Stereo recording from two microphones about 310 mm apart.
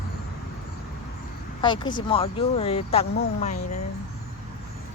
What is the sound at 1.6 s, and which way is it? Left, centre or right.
Speech, centre.